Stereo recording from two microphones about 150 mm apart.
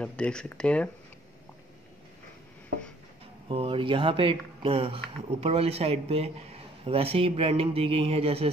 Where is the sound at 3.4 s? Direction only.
35° right (ahead or behind).